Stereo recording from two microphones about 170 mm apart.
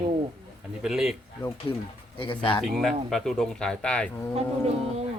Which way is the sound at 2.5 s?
Centre (ahead or behind).